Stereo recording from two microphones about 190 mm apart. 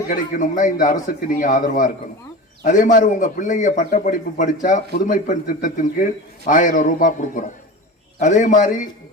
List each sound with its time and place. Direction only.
0.1 s a man's voice: 45° left (ahead or behind)